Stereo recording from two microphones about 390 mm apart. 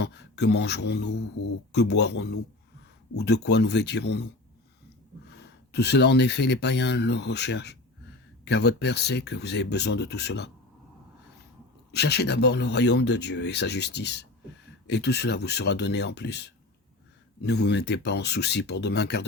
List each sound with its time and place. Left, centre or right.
0.0 s speech: left
11.9 s speech: left